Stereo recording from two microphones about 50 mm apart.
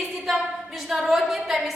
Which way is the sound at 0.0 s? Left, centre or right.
Centre.